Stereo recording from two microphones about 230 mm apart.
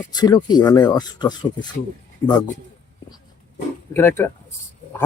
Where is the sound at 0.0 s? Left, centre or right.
Centre.